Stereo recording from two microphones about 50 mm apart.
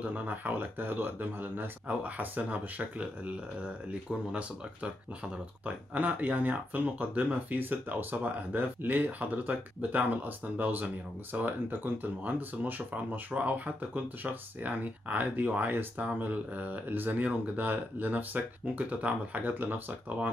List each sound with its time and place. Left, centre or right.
0.0 s speech: right
7.5 s speech: right